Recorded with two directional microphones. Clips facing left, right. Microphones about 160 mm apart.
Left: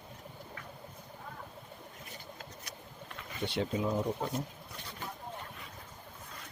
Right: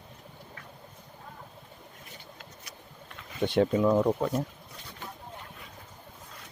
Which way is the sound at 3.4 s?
55° right (ahead or behind).